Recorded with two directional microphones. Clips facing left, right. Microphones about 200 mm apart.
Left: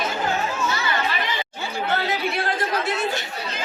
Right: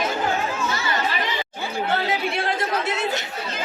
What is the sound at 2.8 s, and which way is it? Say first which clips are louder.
Chatter: even; 20° right (ahead or behind).